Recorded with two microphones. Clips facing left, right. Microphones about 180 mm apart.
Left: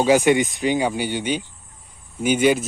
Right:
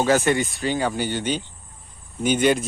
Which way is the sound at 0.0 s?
15° left (ahead or behind).